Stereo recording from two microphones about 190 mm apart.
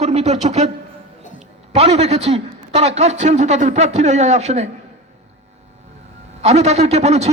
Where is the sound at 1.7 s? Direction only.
35° right (ahead or behind).